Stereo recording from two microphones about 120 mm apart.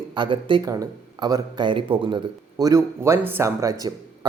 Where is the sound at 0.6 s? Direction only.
30° right (ahead or behind).